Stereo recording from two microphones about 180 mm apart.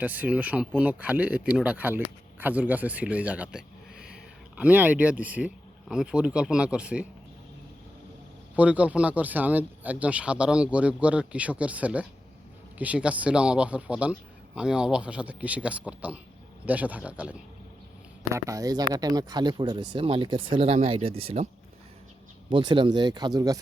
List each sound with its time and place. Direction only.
0.0 s speech: 10° right (ahead or behind)
8.5 s speech: 5° right (ahead or behind)
18.3 s speech: 15° right (ahead or behind)
22.4 s speech: 25° right (ahead or behind)